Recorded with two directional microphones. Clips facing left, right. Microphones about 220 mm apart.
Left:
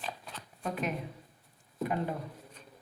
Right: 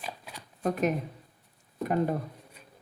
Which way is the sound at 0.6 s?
45° right (ahead or behind).